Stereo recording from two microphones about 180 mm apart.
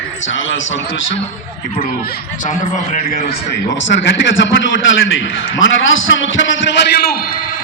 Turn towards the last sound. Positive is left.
turn(degrees=60)  # may be behind; listen again after turning